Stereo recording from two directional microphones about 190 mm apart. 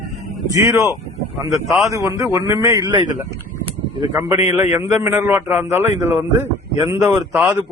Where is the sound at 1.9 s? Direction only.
15° right (ahead or behind).